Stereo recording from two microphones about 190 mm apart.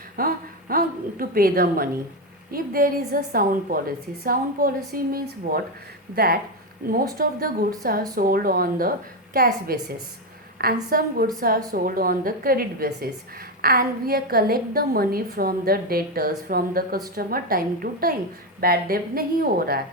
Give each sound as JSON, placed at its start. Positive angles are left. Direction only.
{"t": 0.2, "sound": "a woman's voice", "side_deg": -50}
{"t": 10.8, "sound": "a woman's voice", "side_deg": -50}